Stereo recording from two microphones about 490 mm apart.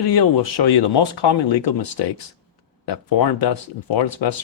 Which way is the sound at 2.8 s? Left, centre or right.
Left.